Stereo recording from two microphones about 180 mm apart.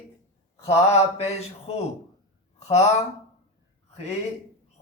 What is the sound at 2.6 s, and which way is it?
Speech, 40° left (ahead or behind).